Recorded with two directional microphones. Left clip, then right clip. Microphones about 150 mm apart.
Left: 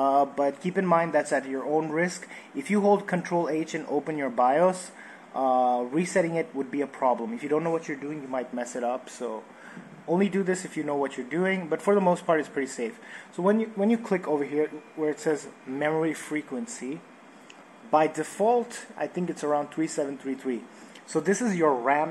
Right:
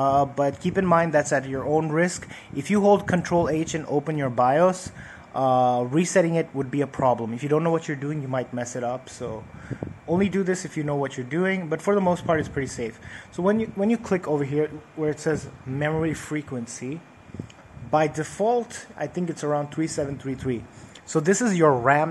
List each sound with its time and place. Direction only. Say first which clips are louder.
0.0 s a man's voice: right 2 dB; 25° right (ahead or behind)
7.7 s a man's voice: right 4 dB; 45° right (ahead or behind)
8.5 s speech: right 1 dB; 15° right (ahead or behind)
17.9 s speech: right 1 dB; 15° right (ahead or behind)
21.1 s a man's voice: right 4 dB; 30° right (ahead or behind)